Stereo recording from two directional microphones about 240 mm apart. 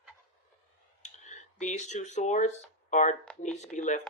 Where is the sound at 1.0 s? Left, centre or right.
Left.